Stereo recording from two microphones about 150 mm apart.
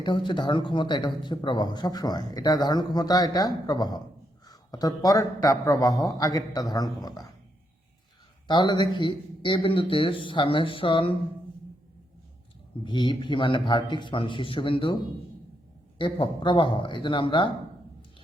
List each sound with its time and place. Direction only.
0.0 s speech: 30° left (ahead or behind)
8.4 s a man's voice: 30° left (ahead or behind)
12.8 s a man's voice: 30° left (ahead or behind)
16.0 s a man's voice: 35° left (ahead or behind)